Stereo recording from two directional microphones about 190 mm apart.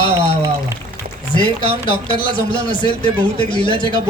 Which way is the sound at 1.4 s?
25° left (ahead or behind).